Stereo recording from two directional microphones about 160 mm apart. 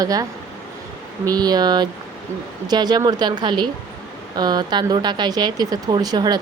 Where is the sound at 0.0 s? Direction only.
20° right (ahead or behind).